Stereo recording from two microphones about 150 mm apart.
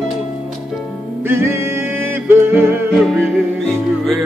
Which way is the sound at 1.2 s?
15° right (ahead or behind).